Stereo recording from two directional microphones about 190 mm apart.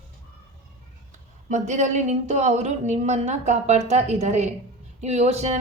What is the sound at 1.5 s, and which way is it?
A woman's voice, 40° right (ahead or behind).